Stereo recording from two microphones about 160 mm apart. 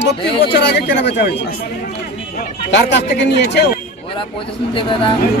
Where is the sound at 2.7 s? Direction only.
90° left.